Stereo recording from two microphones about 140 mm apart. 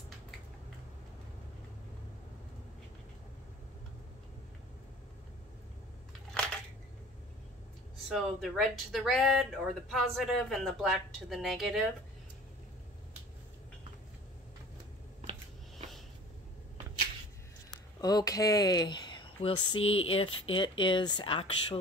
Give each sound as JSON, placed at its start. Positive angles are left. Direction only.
{"t": 6.4, "sound": "a sound", "side_deg": 5}
{"t": 8.1, "sound": "speech", "side_deg": 0}
{"t": 18.0, "sound": "speech", "side_deg": 25}